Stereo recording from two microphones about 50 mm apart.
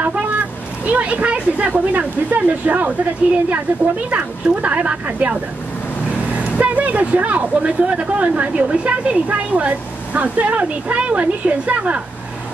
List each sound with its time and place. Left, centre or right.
0.8 s speech: right